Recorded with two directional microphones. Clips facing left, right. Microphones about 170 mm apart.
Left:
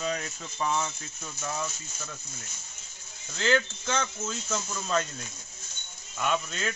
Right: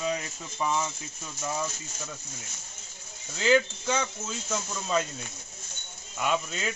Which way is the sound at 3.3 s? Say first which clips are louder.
Right 3 dB; 10° right (ahead or behind).